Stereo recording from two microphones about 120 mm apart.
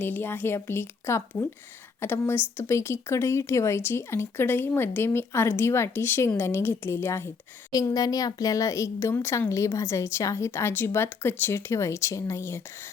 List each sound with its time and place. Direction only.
0.0 s speech: 15° left (ahead or behind)